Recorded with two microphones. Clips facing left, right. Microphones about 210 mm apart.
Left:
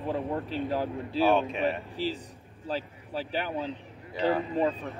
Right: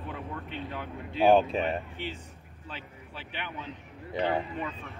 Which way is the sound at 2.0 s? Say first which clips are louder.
Left 6 dB; 35° left (ahead or behind).